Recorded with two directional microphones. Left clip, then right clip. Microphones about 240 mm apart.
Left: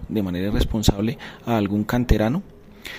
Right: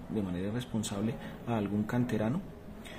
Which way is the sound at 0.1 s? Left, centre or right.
Left.